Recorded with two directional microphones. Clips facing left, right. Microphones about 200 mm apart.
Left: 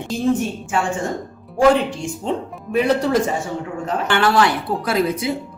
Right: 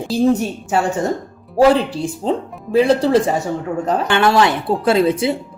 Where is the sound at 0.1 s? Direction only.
40° right (ahead or behind).